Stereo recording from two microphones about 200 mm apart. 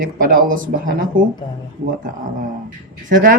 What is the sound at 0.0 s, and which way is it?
Speech, 45° right (ahead or behind).